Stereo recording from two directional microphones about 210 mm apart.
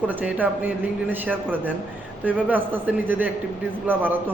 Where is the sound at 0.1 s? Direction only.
10° right (ahead or behind).